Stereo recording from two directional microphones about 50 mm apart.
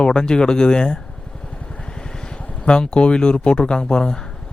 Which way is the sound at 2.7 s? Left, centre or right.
Centre.